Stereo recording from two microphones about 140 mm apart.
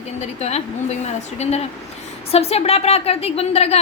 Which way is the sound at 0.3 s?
50° left (ahead or behind).